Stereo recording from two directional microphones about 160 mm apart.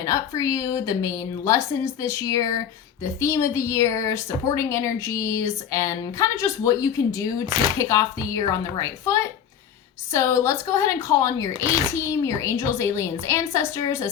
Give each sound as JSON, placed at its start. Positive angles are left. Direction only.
{"t": 0.0, "sound": "a woman's voice", "side_deg": 20}